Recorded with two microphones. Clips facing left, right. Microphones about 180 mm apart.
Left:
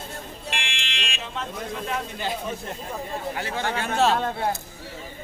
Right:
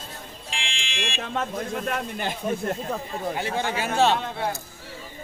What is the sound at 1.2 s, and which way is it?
Speech, 55° right (ahead or behind).